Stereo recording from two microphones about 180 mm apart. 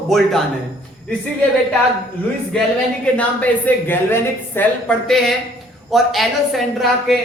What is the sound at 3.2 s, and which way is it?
A woman's voice, 10° left (ahead or behind).